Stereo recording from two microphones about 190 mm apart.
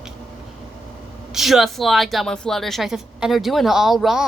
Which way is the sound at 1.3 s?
Centre (ahead or behind).